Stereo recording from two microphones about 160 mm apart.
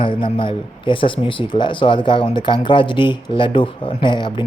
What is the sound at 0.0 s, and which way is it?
Speech, 30° left (ahead or behind).